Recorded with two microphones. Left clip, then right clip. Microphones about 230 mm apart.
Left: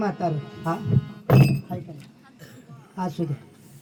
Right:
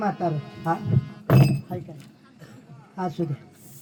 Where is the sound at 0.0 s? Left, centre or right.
Left.